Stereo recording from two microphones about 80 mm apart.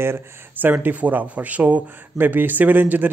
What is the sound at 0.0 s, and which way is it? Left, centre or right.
Speech, right.